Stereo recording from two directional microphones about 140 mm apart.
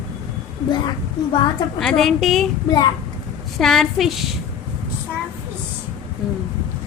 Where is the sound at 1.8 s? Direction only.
Centre (ahead or behind).